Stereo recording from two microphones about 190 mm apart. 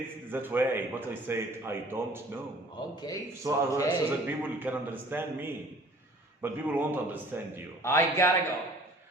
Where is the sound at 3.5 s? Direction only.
20° right (ahead or behind).